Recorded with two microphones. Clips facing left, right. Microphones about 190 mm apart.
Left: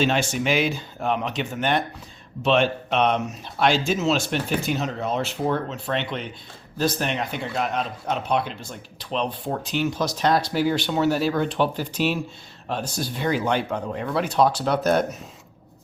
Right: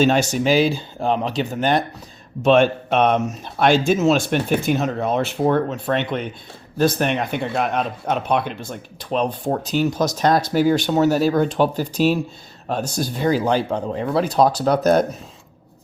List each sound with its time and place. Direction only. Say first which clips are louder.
0.0 s speech: right 5 dB; 40° right (ahead or behind)
2.4 s speech: right 6 dB; 50° right (ahead or behind)